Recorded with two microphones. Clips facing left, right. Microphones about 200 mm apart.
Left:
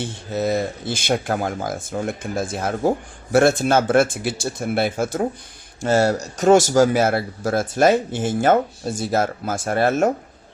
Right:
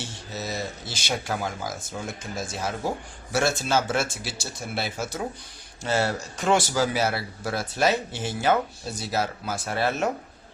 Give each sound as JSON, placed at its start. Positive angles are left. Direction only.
{"t": 0.0, "sound": "a man's voice", "side_deg": 55}